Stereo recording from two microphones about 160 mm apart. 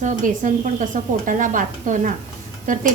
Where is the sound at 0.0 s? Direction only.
50° right (ahead or behind).